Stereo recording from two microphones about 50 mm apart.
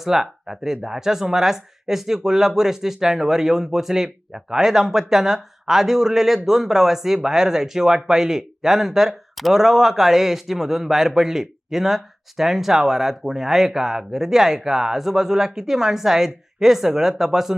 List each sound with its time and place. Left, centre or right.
0.0 s speech: centre